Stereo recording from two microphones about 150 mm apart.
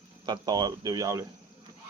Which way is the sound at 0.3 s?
30° right (ahead or behind).